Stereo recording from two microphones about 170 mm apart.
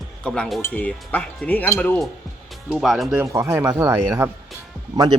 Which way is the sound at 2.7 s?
Centre (ahead or behind).